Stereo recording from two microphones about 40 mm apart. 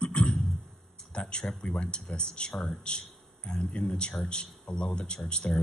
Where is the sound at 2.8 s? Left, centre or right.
Left.